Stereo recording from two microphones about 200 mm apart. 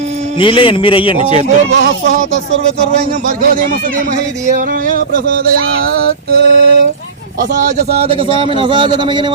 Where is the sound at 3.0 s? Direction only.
40° right (ahead or behind).